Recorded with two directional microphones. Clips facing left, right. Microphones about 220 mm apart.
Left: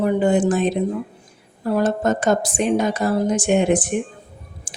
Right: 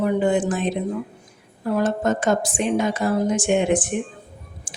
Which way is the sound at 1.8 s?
40° left (ahead or behind).